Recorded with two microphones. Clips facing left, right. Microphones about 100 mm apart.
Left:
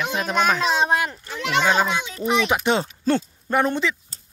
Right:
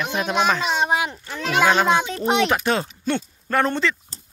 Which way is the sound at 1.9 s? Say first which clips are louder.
Right 7 dB; 45° right (ahead or behind).